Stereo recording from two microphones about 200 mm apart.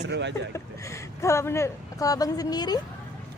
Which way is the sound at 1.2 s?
15° left (ahead or behind).